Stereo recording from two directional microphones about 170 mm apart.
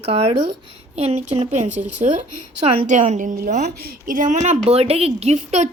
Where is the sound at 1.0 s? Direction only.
40° right (ahead or behind).